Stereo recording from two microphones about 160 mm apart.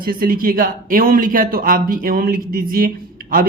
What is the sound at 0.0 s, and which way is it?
A man's voice, 65° right (ahead or behind).